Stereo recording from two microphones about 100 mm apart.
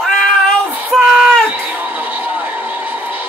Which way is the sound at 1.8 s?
15° right (ahead or behind).